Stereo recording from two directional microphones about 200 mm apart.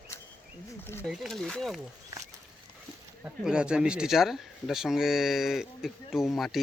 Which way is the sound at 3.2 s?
5° right (ahead or behind).